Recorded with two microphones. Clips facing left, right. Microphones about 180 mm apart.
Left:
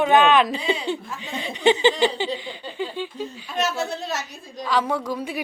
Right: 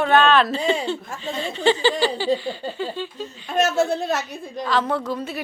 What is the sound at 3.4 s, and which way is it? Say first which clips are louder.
A woman's voice: right 7 dB; 50° right (ahead or behind).